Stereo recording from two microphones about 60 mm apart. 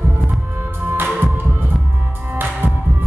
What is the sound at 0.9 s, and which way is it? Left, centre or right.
Music, right.